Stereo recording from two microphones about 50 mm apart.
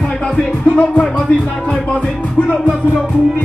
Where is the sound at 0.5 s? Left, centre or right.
Left.